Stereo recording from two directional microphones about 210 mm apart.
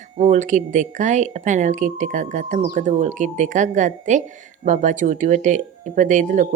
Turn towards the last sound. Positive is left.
turn(degrees=-35)  # may be behind; listen again after turning